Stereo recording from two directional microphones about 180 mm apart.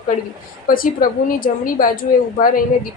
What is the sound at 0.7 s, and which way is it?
A woman's voice, 50° left (ahead or behind).